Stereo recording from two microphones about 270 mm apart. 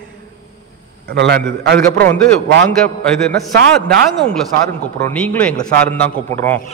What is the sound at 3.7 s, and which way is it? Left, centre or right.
A man's voice, centre.